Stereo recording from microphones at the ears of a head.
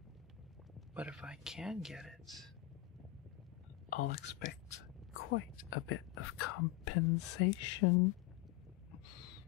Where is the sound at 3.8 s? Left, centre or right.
Left.